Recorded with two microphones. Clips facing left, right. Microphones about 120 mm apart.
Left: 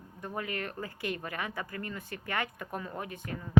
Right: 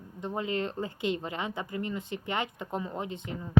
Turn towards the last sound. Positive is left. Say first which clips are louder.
# right 3 dB
turn(degrees=-20)  # may be behind; listen again after turning